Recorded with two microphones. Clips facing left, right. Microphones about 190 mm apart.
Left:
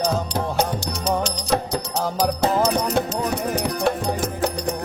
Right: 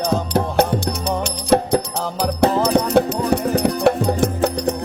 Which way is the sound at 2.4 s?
60° right (ahead or behind).